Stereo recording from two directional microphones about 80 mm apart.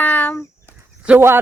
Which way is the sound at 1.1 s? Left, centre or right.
Right.